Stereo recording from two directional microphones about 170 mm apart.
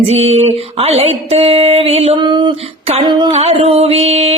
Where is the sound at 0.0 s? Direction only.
35° right (ahead or behind).